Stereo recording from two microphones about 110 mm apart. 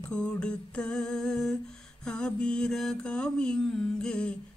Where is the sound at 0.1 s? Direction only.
10° left (ahead or behind).